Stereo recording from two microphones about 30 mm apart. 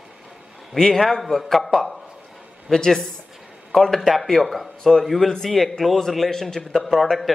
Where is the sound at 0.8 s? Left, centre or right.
Centre.